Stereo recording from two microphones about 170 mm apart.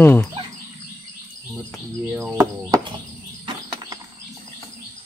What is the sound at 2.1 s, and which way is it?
Speech, 10° right (ahead or behind).